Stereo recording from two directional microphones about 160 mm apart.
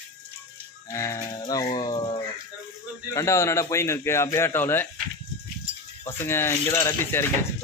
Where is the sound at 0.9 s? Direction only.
20° left (ahead or behind).